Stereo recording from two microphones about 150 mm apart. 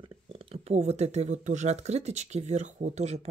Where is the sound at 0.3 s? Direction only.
40° right (ahead or behind).